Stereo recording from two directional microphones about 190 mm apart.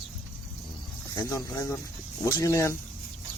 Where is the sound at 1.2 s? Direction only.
15° left (ahead or behind).